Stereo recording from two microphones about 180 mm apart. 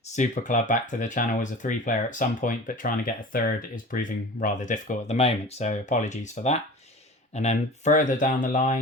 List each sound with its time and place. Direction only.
0.0 s speech: 45° left (ahead or behind)